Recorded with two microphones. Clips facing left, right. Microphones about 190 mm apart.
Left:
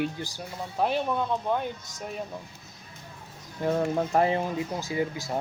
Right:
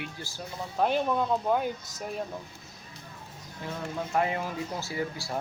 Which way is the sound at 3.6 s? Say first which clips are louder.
Left 9 dB; 50° left (ahead or behind).